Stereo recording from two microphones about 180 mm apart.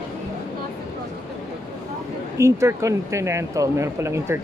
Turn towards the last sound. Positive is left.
turn(degrees=-15)  # may be behind; listen again after turning